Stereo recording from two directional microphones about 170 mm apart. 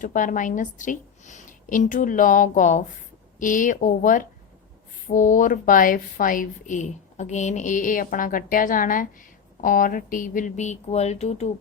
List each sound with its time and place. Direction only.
0.0 s a woman's voice: 50° left (ahead or behind)